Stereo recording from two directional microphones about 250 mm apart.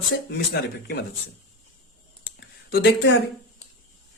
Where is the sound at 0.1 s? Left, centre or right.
Left.